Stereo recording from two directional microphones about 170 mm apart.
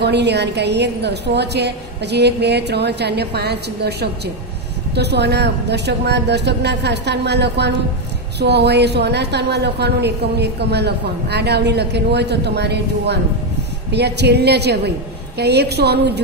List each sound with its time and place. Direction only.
0.0 s a woman's voice: 80° right